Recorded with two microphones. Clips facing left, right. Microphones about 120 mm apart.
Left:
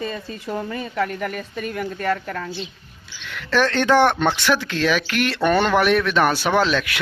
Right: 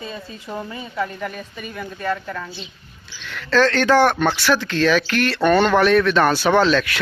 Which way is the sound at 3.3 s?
15° left (ahead or behind).